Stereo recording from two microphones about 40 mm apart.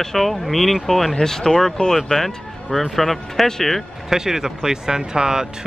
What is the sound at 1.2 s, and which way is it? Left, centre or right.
Speech, centre.